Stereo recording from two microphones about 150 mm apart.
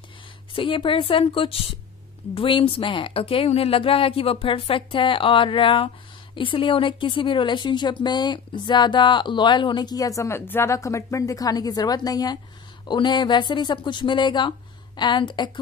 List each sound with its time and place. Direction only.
0.6 s a woman's voice: 35° left (ahead or behind)